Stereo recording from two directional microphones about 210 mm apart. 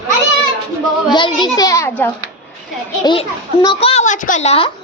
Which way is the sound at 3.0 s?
20° left (ahead or behind).